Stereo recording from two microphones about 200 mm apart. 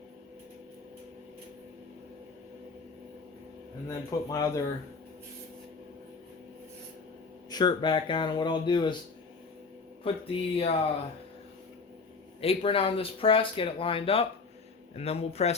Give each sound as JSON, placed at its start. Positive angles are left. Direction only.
{"t": 3.8, "sound": "speech", "side_deg": 15}
{"t": 7.5, "sound": "speech", "side_deg": 20}
{"t": 10.0, "sound": "speech", "side_deg": 30}
{"t": 12.4, "sound": "speech", "side_deg": 30}